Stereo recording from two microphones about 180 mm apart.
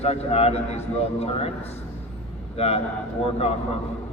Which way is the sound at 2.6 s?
35° left (ahead or behind).